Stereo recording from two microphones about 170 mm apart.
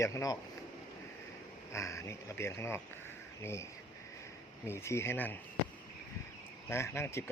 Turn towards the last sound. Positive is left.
turn(degrees=15)  # may be behind; listen again after turning